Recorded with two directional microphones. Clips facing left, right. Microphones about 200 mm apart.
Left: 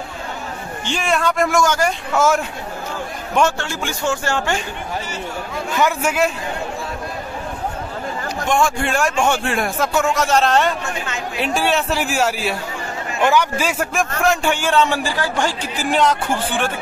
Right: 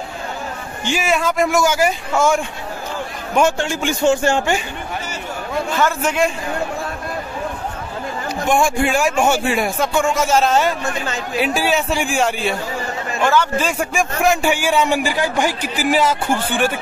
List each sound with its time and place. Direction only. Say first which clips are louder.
0.8 s a man's voice: right 1 dB; 5° right (ahead or behind)
3.3 s a man's voice: right 2 dB; 15° right (ahead or behind)
5.8 s a man's voice: left 1 dB; 10° left (ahead or behind)
8.5 s a man's voice: right 2 dB; 10° right (ahead or behind)
13.2 s a man's voice: even; 15° left (ahead or behind); by 16.7 s 5° right (ahead or behind)